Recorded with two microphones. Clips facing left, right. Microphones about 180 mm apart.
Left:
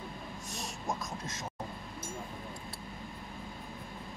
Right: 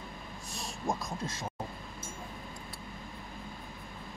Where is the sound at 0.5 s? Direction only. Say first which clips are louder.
Right 3 dB; 30° right (ahead or behind).